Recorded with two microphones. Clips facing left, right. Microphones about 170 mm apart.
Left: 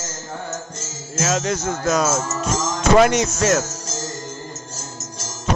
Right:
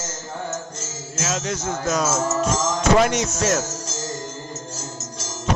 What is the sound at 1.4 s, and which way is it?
Music, 75° left (ahead or behind).